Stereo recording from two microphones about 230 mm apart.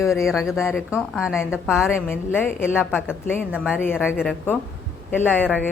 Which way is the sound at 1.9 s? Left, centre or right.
Centre.